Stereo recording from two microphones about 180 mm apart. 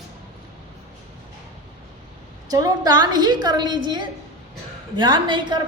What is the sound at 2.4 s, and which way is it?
A woman's voice, 20° right (ahead or behind).